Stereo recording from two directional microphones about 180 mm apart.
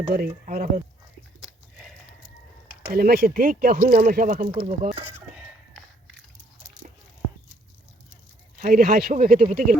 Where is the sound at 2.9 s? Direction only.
60° right (ahead or behind).